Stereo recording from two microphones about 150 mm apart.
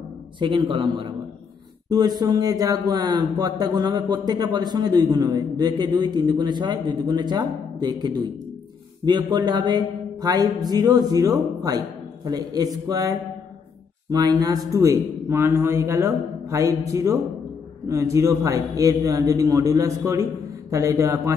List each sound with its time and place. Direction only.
0.4 s a man's voice: 30° right (ahead or behind)
14.1 s a man's voice: 25° right (ahead or behind)